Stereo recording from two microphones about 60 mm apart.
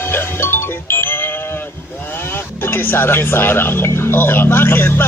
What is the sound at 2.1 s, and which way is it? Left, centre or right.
Speech, left.